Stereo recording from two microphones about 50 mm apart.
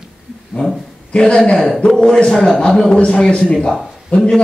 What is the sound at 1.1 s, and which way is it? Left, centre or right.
Speech, centre.